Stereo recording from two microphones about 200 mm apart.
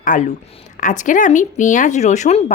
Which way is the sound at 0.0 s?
40° left (ahead or behind).